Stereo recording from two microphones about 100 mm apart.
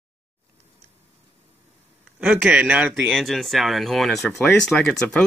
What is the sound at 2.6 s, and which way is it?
Speech, 15° right (ahead or behind).